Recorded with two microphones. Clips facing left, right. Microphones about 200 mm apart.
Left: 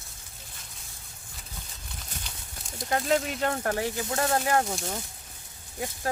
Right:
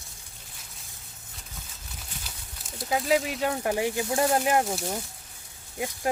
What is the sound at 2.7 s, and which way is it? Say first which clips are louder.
Speech: right 1 dB; 5° right (ahead or behind).